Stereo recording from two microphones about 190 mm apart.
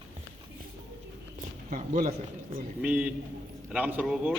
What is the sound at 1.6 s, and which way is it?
Speech, 40° right (ahead or behind).